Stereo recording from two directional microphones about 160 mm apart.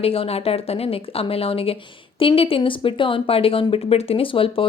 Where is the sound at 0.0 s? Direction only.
35° left (ahead or behind).